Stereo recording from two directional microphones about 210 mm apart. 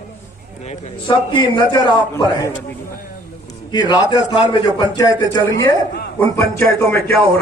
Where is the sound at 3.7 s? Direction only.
20° left (ahead or behind).